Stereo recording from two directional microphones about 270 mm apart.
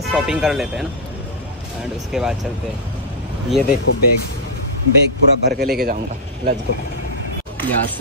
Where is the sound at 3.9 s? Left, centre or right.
Left.